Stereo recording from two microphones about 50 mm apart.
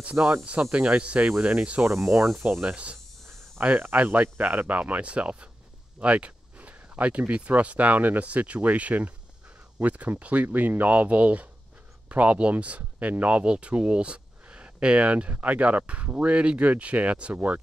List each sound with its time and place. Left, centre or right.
0.0 s speech: right
3.6 s speech: right